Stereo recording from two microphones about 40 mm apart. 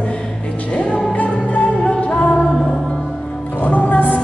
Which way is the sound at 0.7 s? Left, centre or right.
Left.